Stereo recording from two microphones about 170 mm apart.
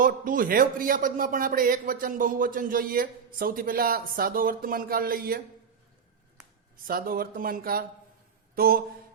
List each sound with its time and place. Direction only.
0.0 s a man's voice: 55° right (ahead or behind)
6.8 s a man's voice: 60° right (ahead or behind)